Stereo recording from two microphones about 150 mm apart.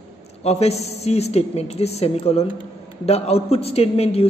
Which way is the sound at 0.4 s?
45° left (ahead or behind).